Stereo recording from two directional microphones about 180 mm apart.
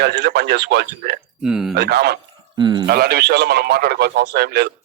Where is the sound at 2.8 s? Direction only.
60° right (ahead or behind).